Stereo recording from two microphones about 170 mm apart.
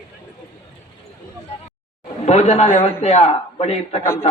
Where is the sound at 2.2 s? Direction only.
40° left (ahead or behind).